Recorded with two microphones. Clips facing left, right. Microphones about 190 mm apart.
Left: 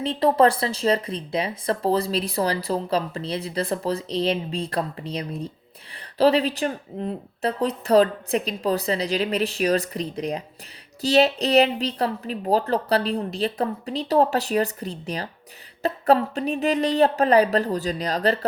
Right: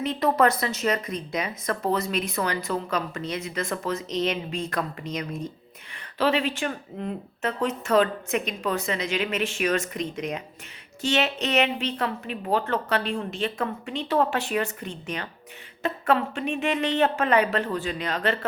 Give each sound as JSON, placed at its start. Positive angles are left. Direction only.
{"t": 0.0, "sound": "a woman's voice", "side_deg": 30}